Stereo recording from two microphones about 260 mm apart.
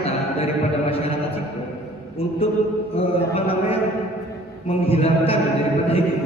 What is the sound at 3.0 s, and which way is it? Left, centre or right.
Speech, left.